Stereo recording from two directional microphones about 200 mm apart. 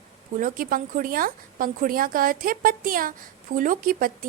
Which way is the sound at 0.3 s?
40° right (ahead or behind).